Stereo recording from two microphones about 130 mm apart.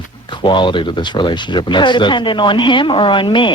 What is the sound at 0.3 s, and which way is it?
Speech, 40° left (ahead or behind).